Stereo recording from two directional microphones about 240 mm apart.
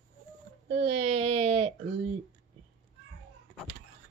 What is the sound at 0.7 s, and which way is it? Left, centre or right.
A woman's voice, right.